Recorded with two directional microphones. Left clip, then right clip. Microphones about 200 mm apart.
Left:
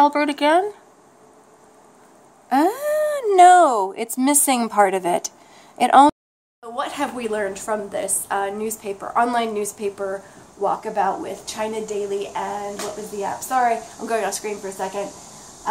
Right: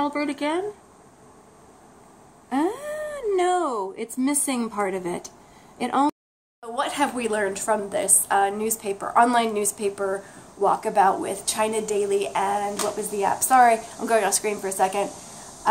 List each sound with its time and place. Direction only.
0.0 s speech: 45° left (ahead or behind)
2.5 s a woman's voice: 45° left (ahead or behind)
6.6 s a woman's voice: centre (ahead or behind); by 13.7 s 30° right (ahead or behind)
13.9 s a woman's voice: 10° right (ahead or behind)
14.6 s a woman's voice: 30° right (ahead or behind)